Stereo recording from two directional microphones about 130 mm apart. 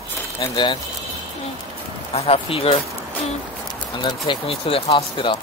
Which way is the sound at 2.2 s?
50° left (ahead or behind).